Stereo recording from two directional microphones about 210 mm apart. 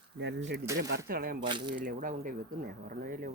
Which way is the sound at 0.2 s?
55° right (ahead or behind).